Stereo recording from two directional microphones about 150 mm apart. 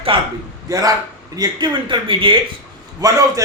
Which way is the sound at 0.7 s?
25° right (ahead or behind).